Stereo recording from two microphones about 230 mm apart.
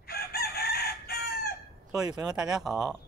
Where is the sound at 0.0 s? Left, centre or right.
Left.